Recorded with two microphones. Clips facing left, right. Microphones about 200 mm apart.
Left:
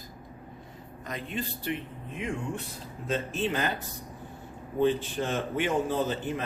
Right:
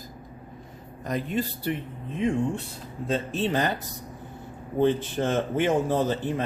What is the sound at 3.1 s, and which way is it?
Speech, 30° right (ahead or behind).